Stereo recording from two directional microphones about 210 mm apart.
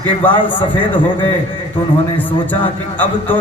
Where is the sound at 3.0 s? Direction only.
10° left (ahead or behind).